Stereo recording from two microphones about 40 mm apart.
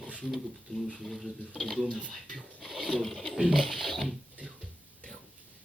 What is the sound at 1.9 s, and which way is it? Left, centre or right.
Speech, left.